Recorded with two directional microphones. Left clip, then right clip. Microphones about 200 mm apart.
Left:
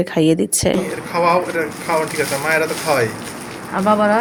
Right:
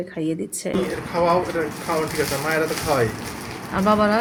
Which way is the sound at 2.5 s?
10° right (ahead or behind).